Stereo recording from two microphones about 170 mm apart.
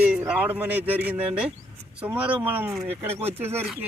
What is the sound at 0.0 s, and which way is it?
A man's voice, 5° right (ahead or behind).